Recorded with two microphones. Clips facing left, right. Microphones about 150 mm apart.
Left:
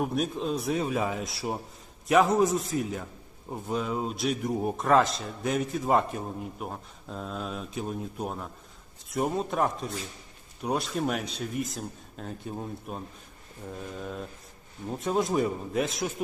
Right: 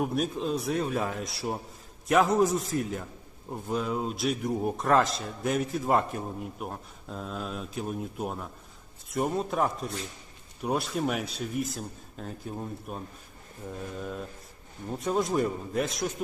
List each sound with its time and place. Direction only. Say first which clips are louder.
0.0 s a man's voice: even; centre (ahead or behind)
14.8 s a man's voice: left 1 dB; centre (ahead or behind)